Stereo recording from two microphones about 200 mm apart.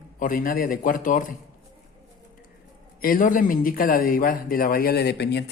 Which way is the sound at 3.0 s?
45° left (ahead or behind).